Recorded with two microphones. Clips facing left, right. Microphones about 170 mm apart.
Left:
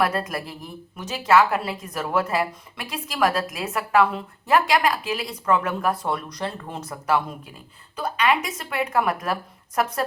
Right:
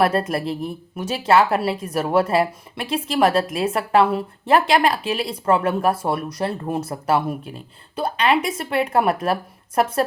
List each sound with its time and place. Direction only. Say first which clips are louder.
0.0 s a woman's voice: right 5 dB; 25° right (ahead or behind)